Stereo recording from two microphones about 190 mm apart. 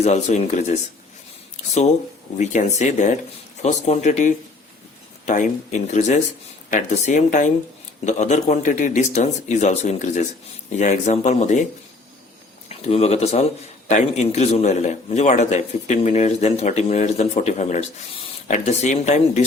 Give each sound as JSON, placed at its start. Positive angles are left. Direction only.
{"t": 0.0, "sound": "a man's voice", "side_deg": 35}
{"t": 2.4, "sound": "a man's voice", "side_deg": 40}